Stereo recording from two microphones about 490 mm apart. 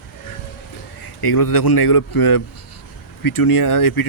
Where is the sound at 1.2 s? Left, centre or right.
Left.